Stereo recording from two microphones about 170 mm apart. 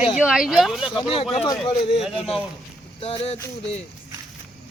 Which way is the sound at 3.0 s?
35° left (ahead or behind).